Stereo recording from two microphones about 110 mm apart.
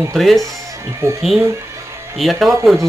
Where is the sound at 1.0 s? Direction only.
25° right (ahead or behind).